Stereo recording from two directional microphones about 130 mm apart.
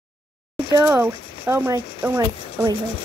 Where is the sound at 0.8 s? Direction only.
15° right (ahead or behind).